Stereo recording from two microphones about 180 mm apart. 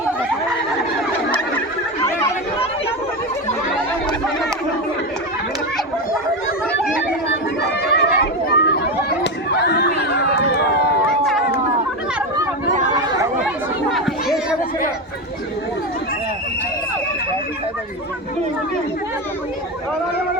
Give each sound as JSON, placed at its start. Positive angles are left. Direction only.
{"t": 7.6, "sound": "chatter", "side_deg": 70}
{"t": 13.9, "sound": "children playing", "side_deg": 0}